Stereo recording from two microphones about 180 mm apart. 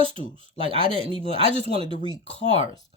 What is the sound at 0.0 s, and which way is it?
Speech, 30° right (ahead or behind).